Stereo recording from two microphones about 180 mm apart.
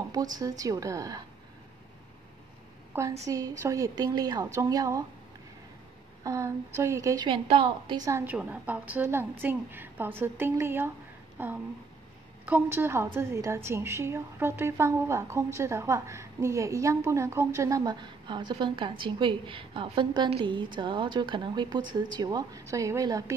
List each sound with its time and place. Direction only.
0.1 s a woman's voice: 20° right (ahead or behind)
2.9 s a woman's voice: 15° right (ahead or behind)
6.2 s a woman's voice: 15° right (ahead or behind)